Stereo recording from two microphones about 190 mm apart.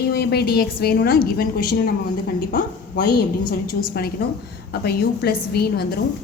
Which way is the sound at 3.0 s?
55° left (ahead or behind).